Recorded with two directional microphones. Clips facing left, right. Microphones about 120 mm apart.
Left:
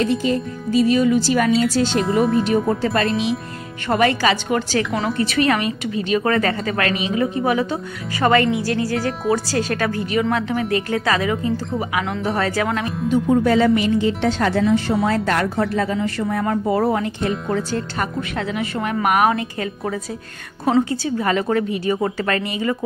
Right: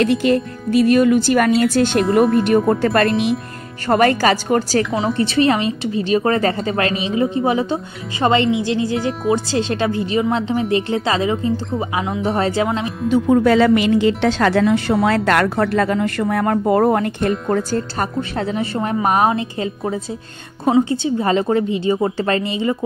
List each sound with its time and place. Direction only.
0.0 s a woman's voice: 70° right (ahead or behind)
2.0 s speech: centre (ahead or behind)
2.7 s a woman's voice: 60° right (ahead or behind)
3.9 s speech: 45° right (ahead or behind)
4.9 s a woman's voice: 30° right (ahead or behind)
13.1 s a woman's voice: 90° right; by 17.3 s 50° right (ahead or behind)
17.5 s a woman's voice: 40° right (ahead or behind)